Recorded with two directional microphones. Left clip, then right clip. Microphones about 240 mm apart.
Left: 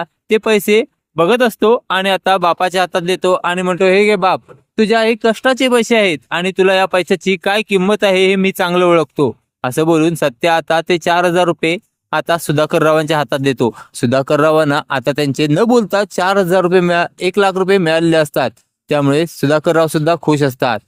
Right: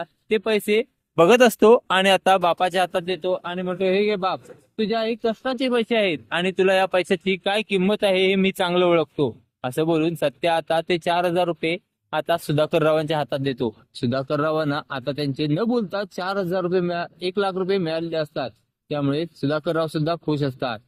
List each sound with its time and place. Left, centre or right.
0.0 s speech: left
1.1 s speech: centre; by 20.8 s left